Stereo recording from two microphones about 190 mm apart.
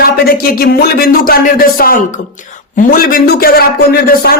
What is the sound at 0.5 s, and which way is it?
A man's voice, 50° left (ahead or behind).